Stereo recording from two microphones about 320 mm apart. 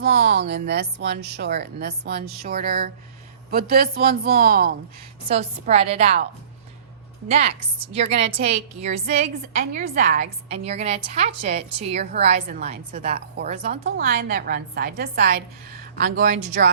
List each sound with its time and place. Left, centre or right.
0.0 s a woman's voice: right
7.3 s a woman's voice: right
13.8 s a woman's voice: right